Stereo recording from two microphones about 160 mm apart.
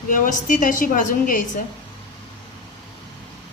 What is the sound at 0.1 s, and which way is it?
A woman's voice, 55° left (ahead or behind).